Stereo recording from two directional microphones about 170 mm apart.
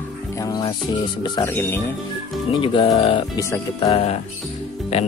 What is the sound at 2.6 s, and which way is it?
Speech, 30° left (ahead or behind).